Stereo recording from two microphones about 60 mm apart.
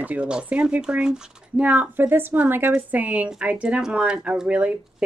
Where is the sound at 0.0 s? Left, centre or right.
Right.